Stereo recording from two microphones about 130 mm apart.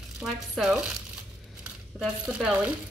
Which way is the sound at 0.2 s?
5° right (ahead or behind).